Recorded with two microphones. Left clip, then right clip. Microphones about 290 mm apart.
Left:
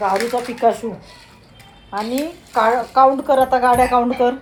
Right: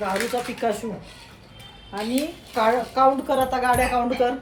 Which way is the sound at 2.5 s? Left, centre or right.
Left.